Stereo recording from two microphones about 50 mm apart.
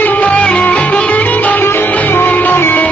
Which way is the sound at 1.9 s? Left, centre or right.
Left.